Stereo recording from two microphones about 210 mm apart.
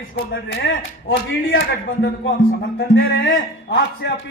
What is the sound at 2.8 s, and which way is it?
Speech, 50° left (ahead or behind).